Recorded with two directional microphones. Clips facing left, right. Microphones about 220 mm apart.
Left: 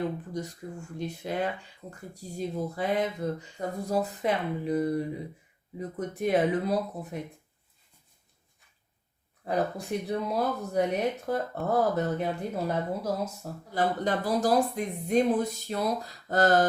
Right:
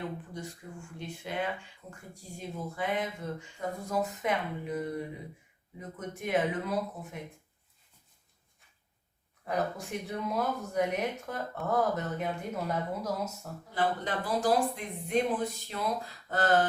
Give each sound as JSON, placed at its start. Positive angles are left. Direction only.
{"t": 0.3, "sound": "speech", "side_deg": 40}
{"t": 9.4, "sound": "speech", "side_deg": 35}